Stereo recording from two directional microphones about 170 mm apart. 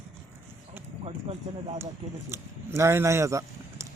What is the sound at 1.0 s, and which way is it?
Speech, 35° right (ahead or behind).